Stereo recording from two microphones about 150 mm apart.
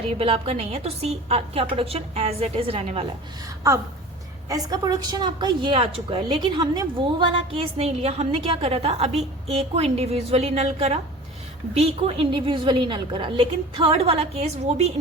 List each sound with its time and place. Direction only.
0.2 s a woman's voice: 40° right (ahead or behind)
4.4 s a woman's voice: 25° right (ahead or behind); by 14.9 s 45° right (ahead or behind)